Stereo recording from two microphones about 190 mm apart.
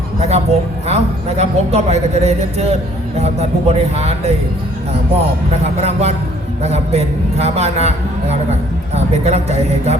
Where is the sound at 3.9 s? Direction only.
35° right (ahead or behind).